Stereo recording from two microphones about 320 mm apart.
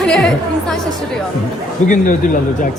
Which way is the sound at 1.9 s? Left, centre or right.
Left.